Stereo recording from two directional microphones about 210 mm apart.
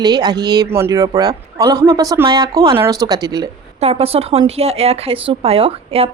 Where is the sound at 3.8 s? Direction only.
30° right (ahead or behind).